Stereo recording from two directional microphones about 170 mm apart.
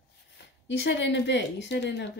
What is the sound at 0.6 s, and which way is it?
A woman's voice, 90° left.